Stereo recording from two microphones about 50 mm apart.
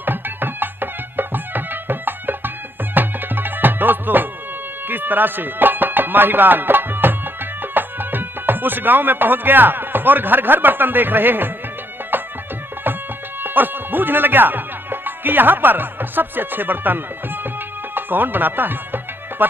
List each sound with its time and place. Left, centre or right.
0.0 s music: right
13.4 s speech: right
17.9 s music: right